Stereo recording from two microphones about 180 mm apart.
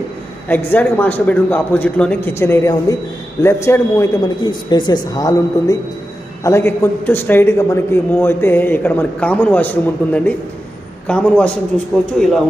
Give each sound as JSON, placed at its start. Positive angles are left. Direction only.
{"t": 0.7, "sound": "a man's voice", "side_deg": 10}